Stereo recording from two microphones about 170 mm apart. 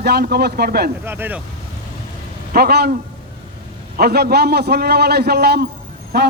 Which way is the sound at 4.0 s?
65° right (ahead or behind).